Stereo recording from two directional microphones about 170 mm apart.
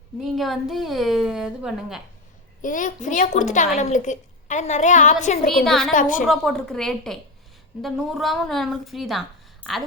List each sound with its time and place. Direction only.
0.3 s a woman's voice: centre (ahead or behind)
2.6 s a woman's voice: 50° left (ahead or behind)
5.6 s a woman's voice: centre (ahead or behind)
5.9 s a woman's voice: 50° left (ahead or behind)
6.2 s a woman's voice: centre (ahead or behind)